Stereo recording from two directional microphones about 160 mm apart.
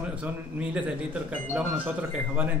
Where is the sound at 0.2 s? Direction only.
10° right (ahead or behind).